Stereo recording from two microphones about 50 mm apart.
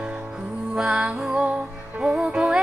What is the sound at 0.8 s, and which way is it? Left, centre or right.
Music, centre.